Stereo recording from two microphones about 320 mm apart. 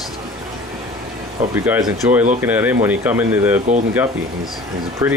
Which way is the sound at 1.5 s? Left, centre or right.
Centre.